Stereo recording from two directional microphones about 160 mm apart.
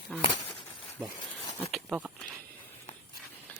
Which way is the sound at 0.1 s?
5° left (ahead or behind).